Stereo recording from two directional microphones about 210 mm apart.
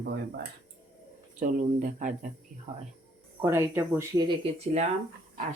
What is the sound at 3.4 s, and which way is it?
Speech, 10° right (ahead or behind).